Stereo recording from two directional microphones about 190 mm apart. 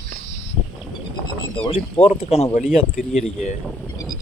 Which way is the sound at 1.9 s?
35° left (ahead or behind).